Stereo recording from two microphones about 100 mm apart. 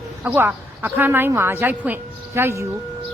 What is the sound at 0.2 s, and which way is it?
Speech, 20° right (ahead or behind).